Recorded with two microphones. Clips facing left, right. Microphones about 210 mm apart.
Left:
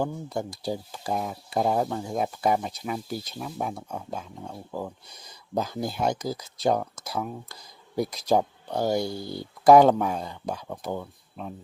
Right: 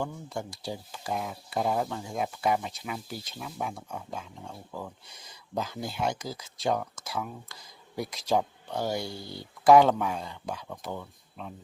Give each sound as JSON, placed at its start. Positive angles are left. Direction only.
{"t": 0.0, "sound": "speech", "side_deg": 40}